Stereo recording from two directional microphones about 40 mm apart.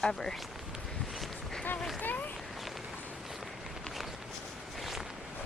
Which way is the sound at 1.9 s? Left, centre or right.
Left.